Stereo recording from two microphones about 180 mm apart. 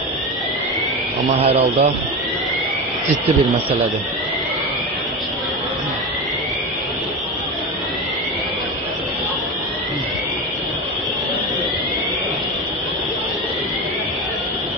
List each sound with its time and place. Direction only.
1.4 s speech: 35° right (ahead or behind)